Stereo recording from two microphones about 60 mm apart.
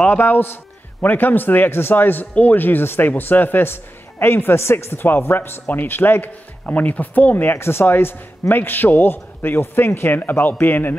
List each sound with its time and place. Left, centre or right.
0.0 s speech: left
4.9 s speech: left
7.5 s speech: left